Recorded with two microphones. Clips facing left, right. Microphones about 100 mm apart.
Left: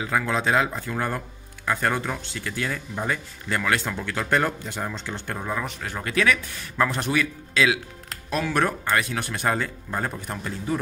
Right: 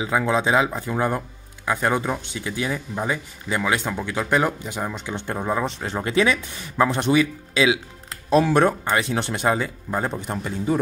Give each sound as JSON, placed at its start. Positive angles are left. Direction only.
{"t": 0.0, "sound": "speech", "side_deg": -15}